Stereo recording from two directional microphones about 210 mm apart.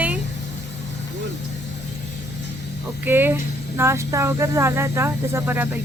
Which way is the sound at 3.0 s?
10° right (ahead or behind).